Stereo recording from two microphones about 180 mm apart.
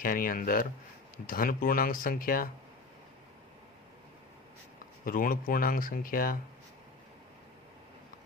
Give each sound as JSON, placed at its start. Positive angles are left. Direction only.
{"t": 0.0, "sound": "speech", "side_deg": 50}
{"t": 5.0, "sound": "speech", "side_deg": 50}